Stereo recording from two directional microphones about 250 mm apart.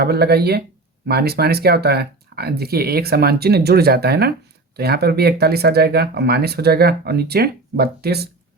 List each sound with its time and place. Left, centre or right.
0.0 s speech: right